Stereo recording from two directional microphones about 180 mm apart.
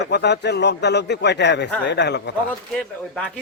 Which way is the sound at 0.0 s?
70° left (ahead or behind).